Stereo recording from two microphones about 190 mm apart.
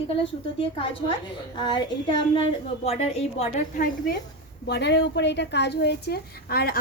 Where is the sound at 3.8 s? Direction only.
55° left (ahead or behind).